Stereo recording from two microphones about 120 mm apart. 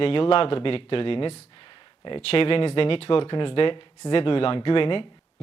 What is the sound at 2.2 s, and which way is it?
Speech, 55° left (ahead or behind).